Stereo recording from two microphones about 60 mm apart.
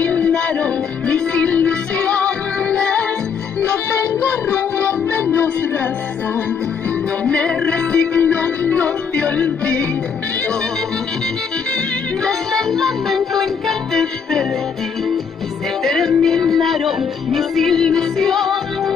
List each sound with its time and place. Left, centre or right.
0.0 s music: left
3.7 s music: left
4.7 s music: left
7.2 s music: centre
12.3 s music: centre
15.8 s music: centre